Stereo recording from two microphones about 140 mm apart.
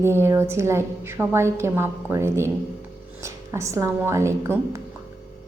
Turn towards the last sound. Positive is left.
turn(degrees=-20)  # may be behind; listen again after turning